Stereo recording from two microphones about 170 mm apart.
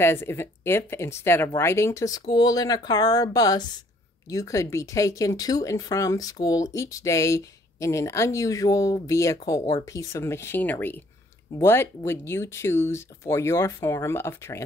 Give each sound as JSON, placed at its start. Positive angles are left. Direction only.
{"t": 0.0, "sound": "speech", "side_deg": 15}